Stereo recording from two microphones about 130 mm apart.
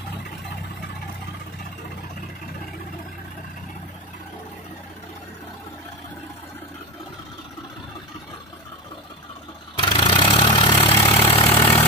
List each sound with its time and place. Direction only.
9.8 s vehicle: 40° left (ahead or behind)
11.1 s vehicle: 50° left (ahead or behind)
11.4 s vehicle: 20° left (ahead or behind)